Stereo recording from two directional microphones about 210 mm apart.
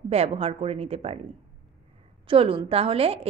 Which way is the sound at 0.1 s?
30° right (ahead or behind).